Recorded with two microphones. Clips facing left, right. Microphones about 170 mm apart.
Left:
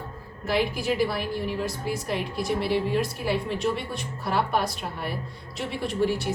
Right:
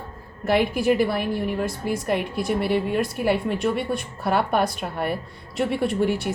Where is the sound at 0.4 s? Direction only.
55° right (ahead or behind).